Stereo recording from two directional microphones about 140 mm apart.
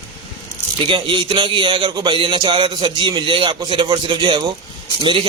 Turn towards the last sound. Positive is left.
turn(degrees=-35)  # may be behind; listen again after turning